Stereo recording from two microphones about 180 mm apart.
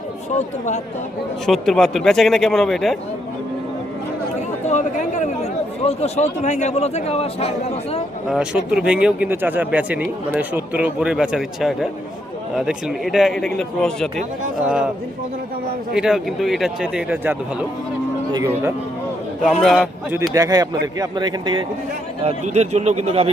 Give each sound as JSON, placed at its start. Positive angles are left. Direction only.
{"t": 0.3, "sound": "speech", "side_deg": 40}
{"t": 1.5, "sound": "speech", "side_deg": 0}
{"t": 4.6, "sound": "speech", "side_deg": 40}
{"t": 8.3, "sound": "speech", "side_deg": -5}
{"t": 16.0, "sound": "speech", "side_deg": 0}
{"t": 18.3, "sound": "speech", "side_deg": -20}
{"t": 19.6, "sound": "speech", "side_deg": 0}
{"t": 20.3, "sound": "speech", "side_deg": -20}
{"t": 22.2, "sound": "a man's voice", "side_deg": -35}